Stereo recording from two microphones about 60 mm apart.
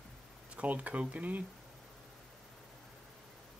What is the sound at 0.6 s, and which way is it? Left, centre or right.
Speech, right.